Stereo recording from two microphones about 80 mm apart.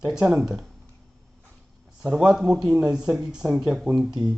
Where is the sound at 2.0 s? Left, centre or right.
Centre.